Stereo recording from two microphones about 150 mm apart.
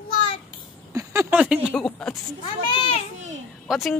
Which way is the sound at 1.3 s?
5° right (ahead or behind).